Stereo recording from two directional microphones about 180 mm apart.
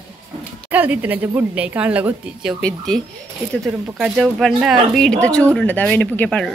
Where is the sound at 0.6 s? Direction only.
10° right (ahead or behind).